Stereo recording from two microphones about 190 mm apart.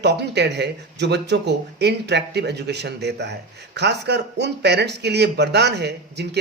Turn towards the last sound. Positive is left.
turn(degrees=-60)  # may be behind; listen again after turning